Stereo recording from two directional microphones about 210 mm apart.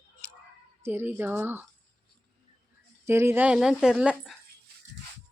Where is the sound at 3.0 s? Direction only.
10° right (ahead or behind).